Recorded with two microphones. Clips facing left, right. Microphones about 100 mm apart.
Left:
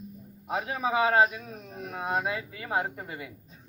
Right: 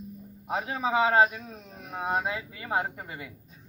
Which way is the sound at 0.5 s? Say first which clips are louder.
Right 1 dB; 25° right (ahead or behind).